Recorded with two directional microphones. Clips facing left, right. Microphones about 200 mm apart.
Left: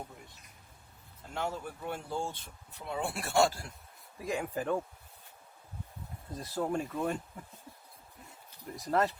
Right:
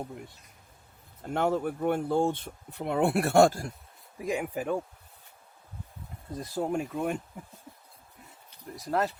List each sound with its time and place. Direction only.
1.3 s speech: 60° right (ahead or behind)
4.2 s speech: 15° right (ahead or behind)
6.4 s speech: 15° right (ahead or behind)
8.7 s speech: centre (ahead or behind)